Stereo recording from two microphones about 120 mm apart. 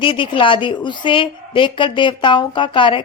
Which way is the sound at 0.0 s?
45° left (ahead or behind).